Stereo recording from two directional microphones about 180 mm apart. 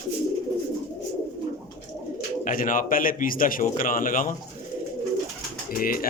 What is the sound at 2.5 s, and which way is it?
A man's voice, 50° left (ahead or behind).